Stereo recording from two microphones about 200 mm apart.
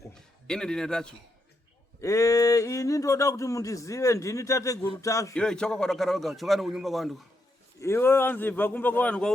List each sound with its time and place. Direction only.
0.1 s a sound: 5° left (ahead or behind)
2.0 s speech: 15° left (ahead or behind)
5.3 s a man's voice: 5° left (ahead or behind)
7.8 s speech: 10° left (ahead or behind)